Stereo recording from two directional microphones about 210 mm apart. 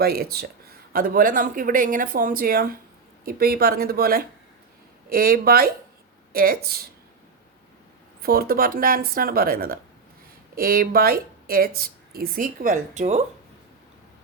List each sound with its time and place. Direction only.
0.0 s speech: 45° right (ahead or behind)
8.2 s speech: 45° right (ahead or behind)